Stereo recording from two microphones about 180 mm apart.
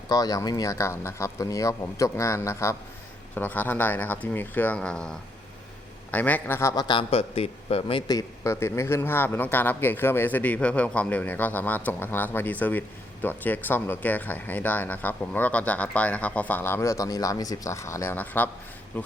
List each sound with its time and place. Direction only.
0.1 s a man's voice: 20° left (ahead or behind)